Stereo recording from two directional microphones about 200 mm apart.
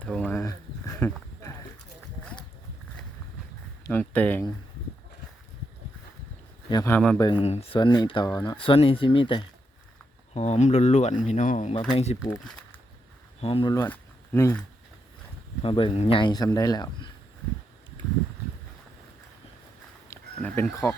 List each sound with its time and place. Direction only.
0.0 s a sound: 5° left (ahead or behind)
3.8 s speech: 10° left (ahead or behind)
6.7 s speech: 15° left (ahead or behind)
7.2 s speech: 25° left (ahead or behind)
12.3 s speech: 10° left (ahead or behind)
13.4 s speech: 25° left (ahead or behind); by 14.6 s 10° left (ahead or behind)
15.6 s speech: 25° left (ahead or behind)
20.1 s speech: 10° left (ahead or behind)